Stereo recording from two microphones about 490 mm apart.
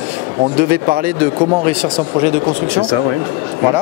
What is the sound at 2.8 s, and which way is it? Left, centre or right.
Speech, right.